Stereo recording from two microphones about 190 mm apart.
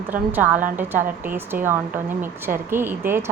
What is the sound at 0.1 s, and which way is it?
A woman's voice, 10° right (ahead or behind).